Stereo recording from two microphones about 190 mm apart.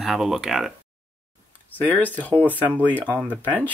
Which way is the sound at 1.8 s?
10° left (ahead or behind).